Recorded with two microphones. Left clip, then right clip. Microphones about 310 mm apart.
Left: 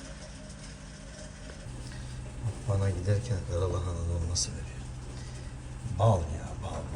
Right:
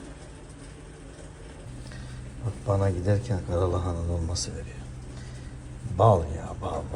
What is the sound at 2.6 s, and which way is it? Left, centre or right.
A man's voice, centre.